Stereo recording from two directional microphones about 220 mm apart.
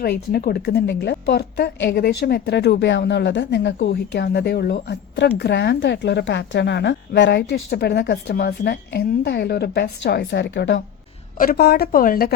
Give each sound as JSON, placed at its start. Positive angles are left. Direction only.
{"t": 0.0, "sound": "a woman's voice", "side_deg": 45}